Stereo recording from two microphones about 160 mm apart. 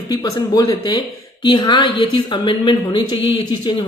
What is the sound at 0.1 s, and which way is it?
Speech, 25° left (ahead or behind).